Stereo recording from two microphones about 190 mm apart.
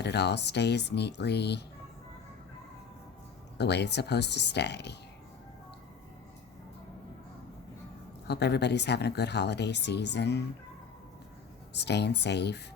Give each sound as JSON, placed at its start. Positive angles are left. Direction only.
{"t": 0.0, "sound": "speech", "side_deg": 60}
{"t": 3.6, "sound": "speech", "side_deg": 60}
{"t": 8.3, "sound": "speech", "side_deg": 60}
{"t": 11.7, "sound": "speech", "side_deg": 60}